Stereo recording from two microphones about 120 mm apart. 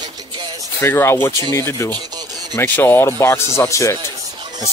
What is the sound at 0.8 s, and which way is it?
Speech, 20° left (ahead or behind).